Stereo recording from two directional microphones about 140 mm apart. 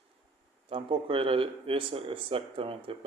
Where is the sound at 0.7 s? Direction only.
40° right (ahead or behind).